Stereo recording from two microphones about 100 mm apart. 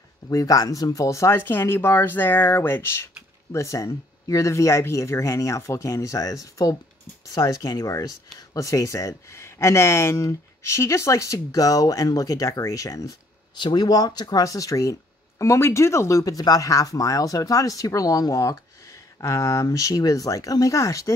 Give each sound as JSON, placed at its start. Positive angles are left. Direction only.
{"t": 0.3, "sound": "speech", "side_deg": 35}
{"t": 13.6, "sound": "speech", "side_deg": 45}